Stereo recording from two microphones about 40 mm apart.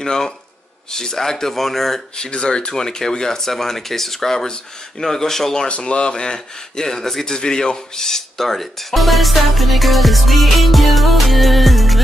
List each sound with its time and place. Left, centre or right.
0.0 s speech: centre
2.1 s speech: centre
5.7 s speech: left; by 7.3 s centre
7.3 s speech: centre